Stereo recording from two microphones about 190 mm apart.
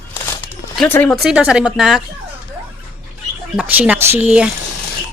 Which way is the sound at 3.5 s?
10° right (ahead or behind).